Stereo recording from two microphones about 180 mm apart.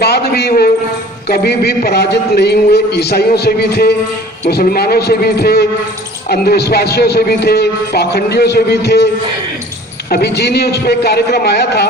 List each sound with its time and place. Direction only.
0.0 s a sound: 60° left (ahead or behind)
1.3 s a man's voice: 60° left (ahead or behind)
10.1 s a man's voice: 65° left (ahead or behind)